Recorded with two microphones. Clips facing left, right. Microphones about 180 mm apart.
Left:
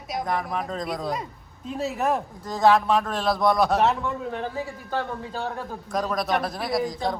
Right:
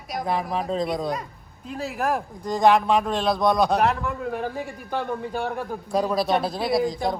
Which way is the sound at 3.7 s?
Centre (ahead or behind).